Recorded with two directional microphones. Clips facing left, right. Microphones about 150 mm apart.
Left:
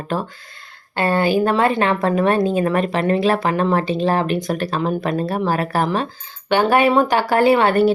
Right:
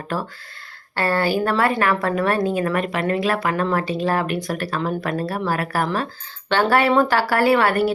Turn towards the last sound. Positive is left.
turn(degrees=25)  # may be behind; listen again after turning